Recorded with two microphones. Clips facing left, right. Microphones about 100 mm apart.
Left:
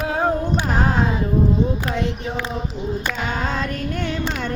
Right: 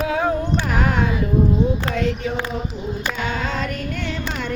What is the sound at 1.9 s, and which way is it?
Child singing, 25° left (ahead or behind).